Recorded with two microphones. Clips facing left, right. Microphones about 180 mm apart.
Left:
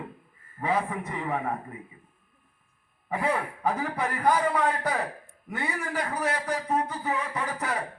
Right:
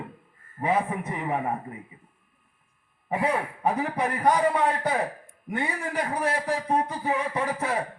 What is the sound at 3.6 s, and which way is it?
A man's voice, 25° right (ahead or behind).